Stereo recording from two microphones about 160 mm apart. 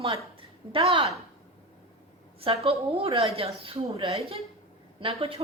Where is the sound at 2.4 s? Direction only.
35° right (ahead or behind).